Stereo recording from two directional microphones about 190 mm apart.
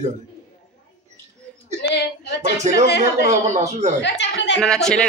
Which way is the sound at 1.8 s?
65° left (ahead or behind).